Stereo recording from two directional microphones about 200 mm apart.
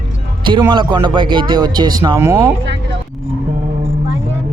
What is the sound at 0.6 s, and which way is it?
Speech, 25° right (ahead or behind).